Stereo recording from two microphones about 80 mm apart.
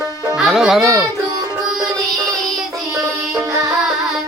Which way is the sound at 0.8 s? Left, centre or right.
Right.